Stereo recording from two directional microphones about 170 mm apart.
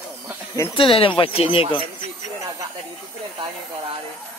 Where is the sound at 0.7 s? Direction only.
30° left (ahead or behind).